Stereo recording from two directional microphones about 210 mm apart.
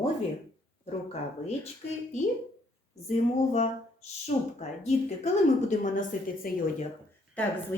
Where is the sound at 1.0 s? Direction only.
30° left (ahead or behind).